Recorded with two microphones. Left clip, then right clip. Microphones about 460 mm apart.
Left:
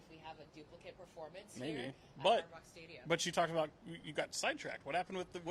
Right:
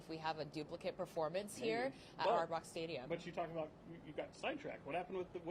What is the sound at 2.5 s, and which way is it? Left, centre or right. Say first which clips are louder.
Speech: right 11 dB; right.